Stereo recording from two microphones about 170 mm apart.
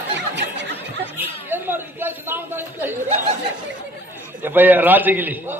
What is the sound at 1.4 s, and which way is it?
A man's voice, 10° right (ahead or behind).